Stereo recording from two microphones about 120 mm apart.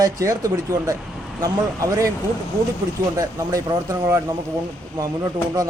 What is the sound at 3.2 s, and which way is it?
A man's voice, 30° right (ahead or behind).